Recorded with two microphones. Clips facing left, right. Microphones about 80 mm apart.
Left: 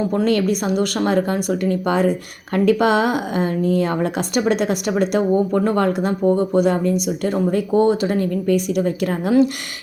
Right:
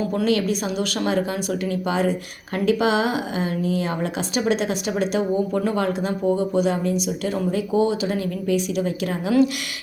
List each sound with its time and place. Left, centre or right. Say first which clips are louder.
0.3 s a woman's voice: left 3 dB; left